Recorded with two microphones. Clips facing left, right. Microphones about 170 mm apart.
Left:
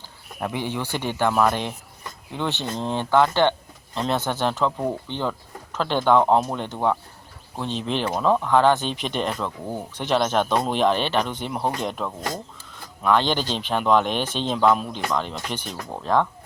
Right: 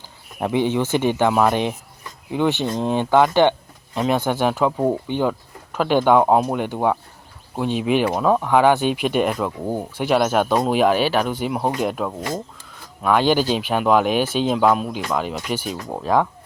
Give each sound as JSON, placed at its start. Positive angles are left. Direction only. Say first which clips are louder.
{"t": 0.3, "sound": "speech", "louder": "right 8 dB", "side_deg": -20}